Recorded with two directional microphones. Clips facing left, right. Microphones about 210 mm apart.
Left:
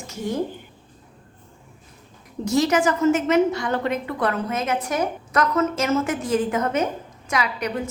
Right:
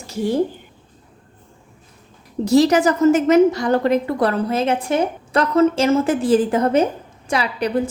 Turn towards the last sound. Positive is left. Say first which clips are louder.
# right 6 dB
turn(degrees=-30)  # may be behind; listen again after turning